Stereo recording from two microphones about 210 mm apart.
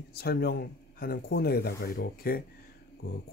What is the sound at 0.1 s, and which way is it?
Speech, 50° left (ahead or behind).